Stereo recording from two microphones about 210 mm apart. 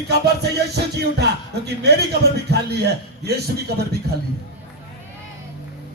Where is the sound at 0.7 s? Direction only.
50° right (ahead or behind).